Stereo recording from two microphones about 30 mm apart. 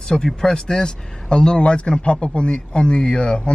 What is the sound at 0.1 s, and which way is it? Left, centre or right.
Speech, centre.